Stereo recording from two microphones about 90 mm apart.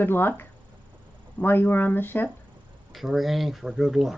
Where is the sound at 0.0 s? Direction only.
25° left (ahead or behind).